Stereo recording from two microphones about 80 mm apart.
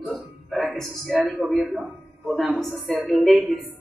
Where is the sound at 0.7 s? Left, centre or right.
Centre.